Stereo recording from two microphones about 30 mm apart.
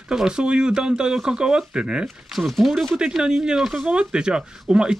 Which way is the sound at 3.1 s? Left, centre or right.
Centre.